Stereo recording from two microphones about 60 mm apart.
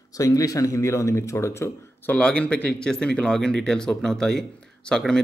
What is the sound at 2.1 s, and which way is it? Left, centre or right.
Speech, centre.